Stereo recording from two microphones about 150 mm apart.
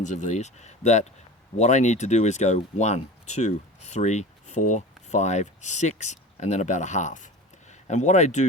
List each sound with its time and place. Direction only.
0.0 s speech: 55° left (ahead or behind)